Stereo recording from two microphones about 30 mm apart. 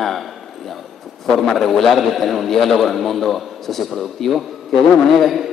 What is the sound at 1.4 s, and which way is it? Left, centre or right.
A man's voice, centre.